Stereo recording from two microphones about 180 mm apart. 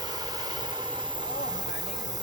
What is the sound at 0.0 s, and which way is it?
Vehicle, 20° right (ahead or behind).